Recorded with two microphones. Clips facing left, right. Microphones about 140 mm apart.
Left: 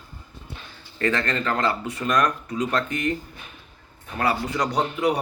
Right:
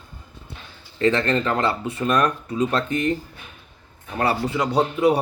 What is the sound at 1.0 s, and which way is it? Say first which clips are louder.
Speech: right 5 dB; 25° right (ahead or behind).